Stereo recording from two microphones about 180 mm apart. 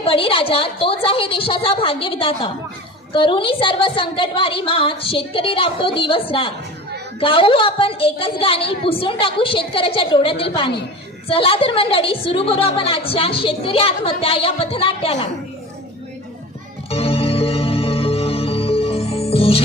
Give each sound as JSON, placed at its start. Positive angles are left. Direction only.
{"t": 0.0, "sound": "a woman's voice", "side_deg": 30}
{"t": 16.9, "sound": "music", "side_deg": 30}